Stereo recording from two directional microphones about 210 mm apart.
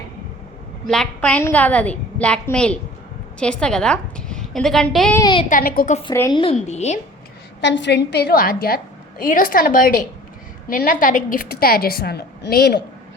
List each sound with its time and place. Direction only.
0.9 s a woman's voice: 5° left (ahead or behind)
5.1 s a woman's voice: 20° left (ahead or behind)
5.5 s a woman's voice: 45° left (ahead or behind)
6.1 s a woman's voice: 20° left (ahead or behind)
7.6 s a woman's voice: 55° left (ahead or behind)